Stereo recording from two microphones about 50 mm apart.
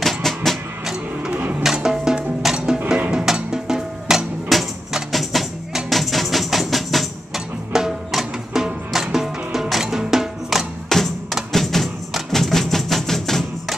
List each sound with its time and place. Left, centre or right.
0.0 s music: centre
1.3 s music: right
1.6 s music: centre
3.3 s drum: centre
4.5 s music: centre
7.7 s music: centre
10.9 s music: centre